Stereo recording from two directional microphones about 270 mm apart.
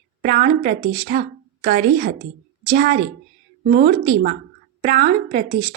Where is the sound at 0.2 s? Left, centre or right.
Right.